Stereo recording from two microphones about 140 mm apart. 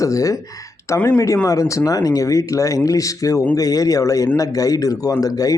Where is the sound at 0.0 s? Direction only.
25° left (ahead or behind).